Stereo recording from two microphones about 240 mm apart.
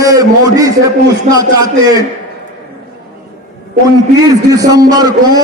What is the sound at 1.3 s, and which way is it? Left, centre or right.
Speech, centre.